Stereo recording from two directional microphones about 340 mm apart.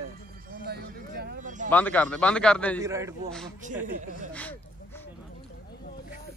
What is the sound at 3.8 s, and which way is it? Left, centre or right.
Speech, right.